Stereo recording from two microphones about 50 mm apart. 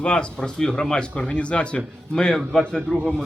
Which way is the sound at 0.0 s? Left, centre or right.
Left.